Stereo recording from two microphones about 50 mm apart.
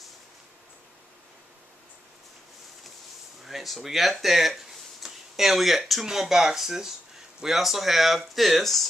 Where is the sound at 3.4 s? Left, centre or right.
Centre.